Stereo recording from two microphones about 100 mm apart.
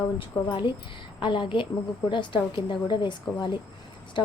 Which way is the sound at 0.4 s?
55° left (ahead or behind).